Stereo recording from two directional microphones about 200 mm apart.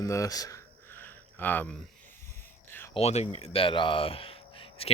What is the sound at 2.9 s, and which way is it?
Speech, 30° left (ahead or behind).